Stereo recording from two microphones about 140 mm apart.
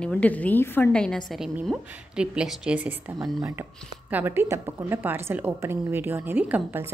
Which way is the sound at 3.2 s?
25° right (ahead or behind).